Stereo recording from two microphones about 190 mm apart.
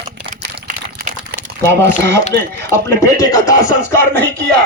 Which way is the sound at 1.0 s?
55° right (ahead or behind).